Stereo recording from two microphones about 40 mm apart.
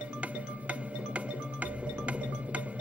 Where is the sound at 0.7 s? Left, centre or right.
Right.